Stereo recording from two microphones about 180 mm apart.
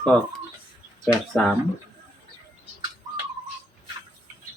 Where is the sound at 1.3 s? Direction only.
5° left (ahead or behind).